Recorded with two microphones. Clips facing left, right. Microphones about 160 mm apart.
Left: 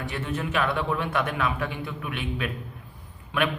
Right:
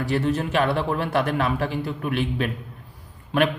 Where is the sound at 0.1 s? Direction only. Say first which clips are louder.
Right 7 dB; 35° right (ahead or behind).